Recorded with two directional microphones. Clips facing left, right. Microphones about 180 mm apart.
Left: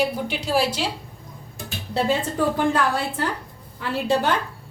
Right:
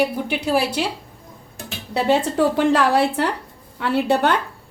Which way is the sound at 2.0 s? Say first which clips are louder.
Right 5 dB; 75° right (ahead or behind).